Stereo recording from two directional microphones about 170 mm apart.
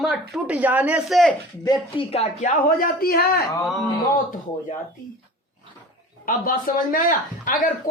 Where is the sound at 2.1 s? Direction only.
40° left (ahead or behind).